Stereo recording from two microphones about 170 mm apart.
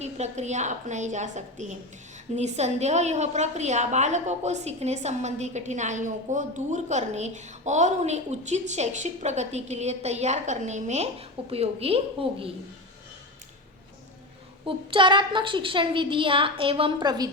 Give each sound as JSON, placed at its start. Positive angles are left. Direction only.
{"t": 0.0, "sound": "a woman's voice", "side_deg": -40}
{"t": 14.6, "sound": "a woman's voice", "side_deg": -30}